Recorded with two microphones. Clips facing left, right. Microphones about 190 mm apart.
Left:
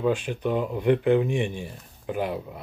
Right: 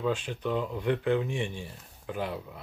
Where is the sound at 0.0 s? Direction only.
15° left (ahead or behind).